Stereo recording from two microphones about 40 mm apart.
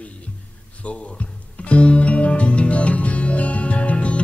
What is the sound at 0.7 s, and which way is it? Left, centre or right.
Music, left.